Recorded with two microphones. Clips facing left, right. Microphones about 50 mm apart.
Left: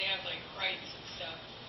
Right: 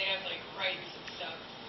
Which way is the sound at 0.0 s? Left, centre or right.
Centre.